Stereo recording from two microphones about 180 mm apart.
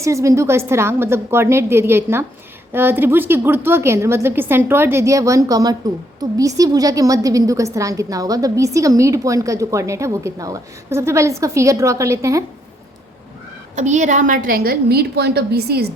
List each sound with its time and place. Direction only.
0.0 s a woman's voice: 15° right (ahead or behind)
13.7 s a woman's voice: 40° right (ahead or behind); by 15.9 s 60° right (ahead or behind)